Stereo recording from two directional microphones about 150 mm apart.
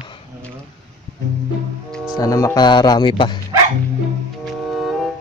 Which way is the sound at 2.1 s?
25° left (ahead or behind).